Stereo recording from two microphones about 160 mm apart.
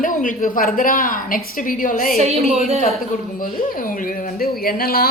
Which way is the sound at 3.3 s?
60° left (ahead or behind).